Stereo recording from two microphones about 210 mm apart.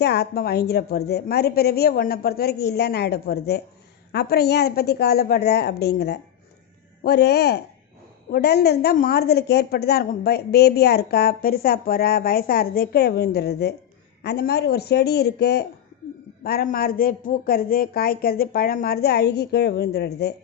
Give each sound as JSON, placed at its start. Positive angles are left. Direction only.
{"t": 0.0, "sound": "a woman's voice", "side_deg": 50}